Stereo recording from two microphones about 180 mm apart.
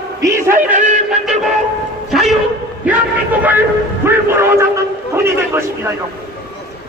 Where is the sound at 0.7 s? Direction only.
40° right (ahead or behind).